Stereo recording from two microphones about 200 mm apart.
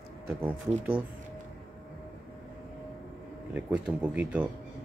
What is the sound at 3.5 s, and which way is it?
Speech, 5° right (ahead or behind).